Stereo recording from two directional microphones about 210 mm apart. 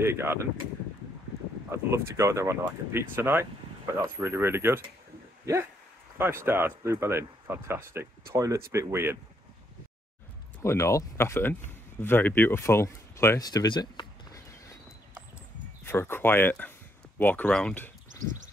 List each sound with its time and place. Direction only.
0.0 s speech: 10° right (ahead or behind)
1.7 s speech: 15° right (ahead or behind)
10.6 s speech: 15° left (ahead or behind)
15.8 s speech: 10° left (ahead or behind)
18.2 s bird: 40° right (ahead or behind)